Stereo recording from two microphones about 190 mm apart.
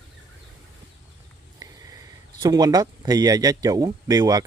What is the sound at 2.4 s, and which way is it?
Speech, 20° right (ahead or behind).